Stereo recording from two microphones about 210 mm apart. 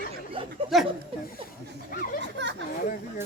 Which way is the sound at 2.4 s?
55° right (ahead or behind).